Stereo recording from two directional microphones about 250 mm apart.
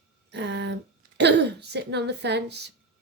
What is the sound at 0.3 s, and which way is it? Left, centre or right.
A woman's voice, right.